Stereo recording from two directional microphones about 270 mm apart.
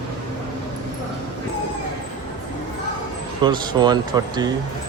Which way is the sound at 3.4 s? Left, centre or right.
Centre.